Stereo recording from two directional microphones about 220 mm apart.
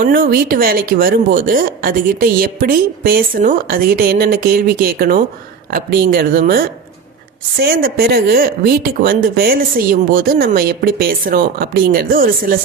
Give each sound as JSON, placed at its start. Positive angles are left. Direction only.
{"t": 0.0, "sound": "speech", "side_deg": -40}